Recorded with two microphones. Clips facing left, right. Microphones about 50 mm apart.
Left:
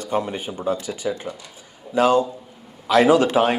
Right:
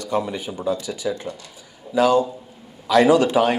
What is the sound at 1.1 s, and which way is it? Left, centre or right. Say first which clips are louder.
Speech: even; left.